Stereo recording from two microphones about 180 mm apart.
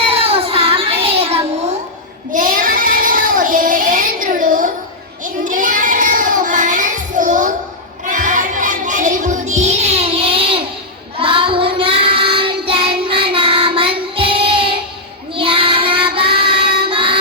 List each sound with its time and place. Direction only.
0.1 s child singing: 30° right (ahead or behind)
2.3 s child singing: 50° right (ahead or behind)
8.0 s music: 45° right (ahead or behind)
11.2 s child singing: 30° right (ahead or behind)